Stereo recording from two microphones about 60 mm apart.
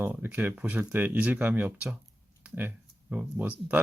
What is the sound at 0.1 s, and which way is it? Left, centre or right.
Speech, right.